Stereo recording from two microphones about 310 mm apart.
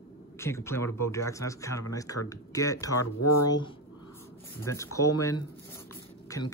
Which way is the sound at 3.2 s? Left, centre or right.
Left.